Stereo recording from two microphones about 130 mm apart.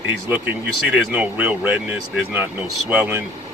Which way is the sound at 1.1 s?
10° right (ahead or behind).